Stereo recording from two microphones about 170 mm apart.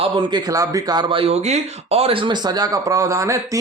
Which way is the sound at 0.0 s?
25° right (ahead or behind).